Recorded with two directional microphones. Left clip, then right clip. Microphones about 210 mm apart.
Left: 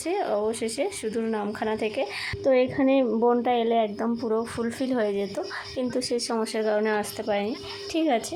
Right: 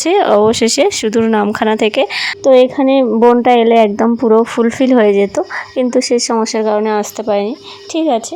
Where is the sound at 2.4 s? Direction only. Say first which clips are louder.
Right 13 dB; 35° right (ahead or behind).